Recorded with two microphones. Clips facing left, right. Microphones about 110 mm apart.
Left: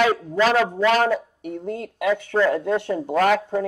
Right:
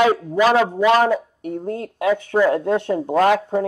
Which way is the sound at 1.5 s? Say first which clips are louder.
Right 3 dB; 40° right (ahead or behind).